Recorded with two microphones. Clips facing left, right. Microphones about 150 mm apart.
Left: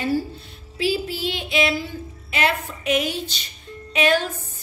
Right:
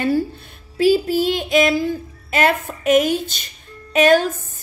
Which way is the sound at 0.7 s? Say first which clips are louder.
Right 9 dB; 45° right (ahead or behind).